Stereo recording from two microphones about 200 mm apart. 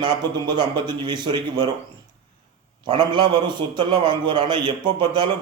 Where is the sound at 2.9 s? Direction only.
20° right (ahead or behind).